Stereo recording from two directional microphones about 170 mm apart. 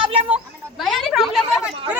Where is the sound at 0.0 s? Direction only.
30° right (ahead or behind).